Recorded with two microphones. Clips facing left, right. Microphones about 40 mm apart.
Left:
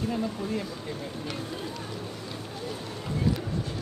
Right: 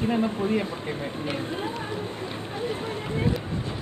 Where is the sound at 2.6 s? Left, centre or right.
Right.